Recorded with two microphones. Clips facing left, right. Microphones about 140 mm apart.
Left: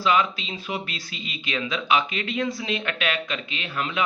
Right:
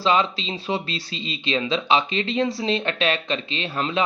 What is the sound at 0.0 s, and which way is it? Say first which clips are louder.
Speech: right 2 dB; 30° right (ahead or behind).